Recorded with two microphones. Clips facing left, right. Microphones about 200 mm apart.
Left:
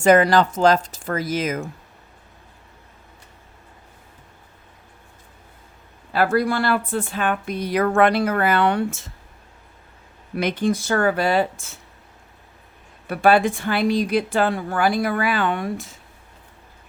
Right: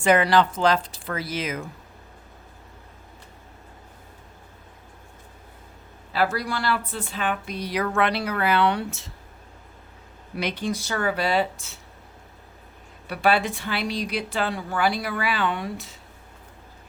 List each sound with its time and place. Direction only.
0.0 s speech: 45° left (ahead or behind)
6.1 s speech: 50° left (ahead or behind)
10.3 s speech: 50° left (ahead or behind)
13.1 s speech: 50° left (ahead or behind)